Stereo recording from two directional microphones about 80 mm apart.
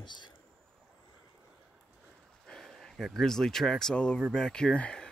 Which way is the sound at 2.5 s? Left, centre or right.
Centre.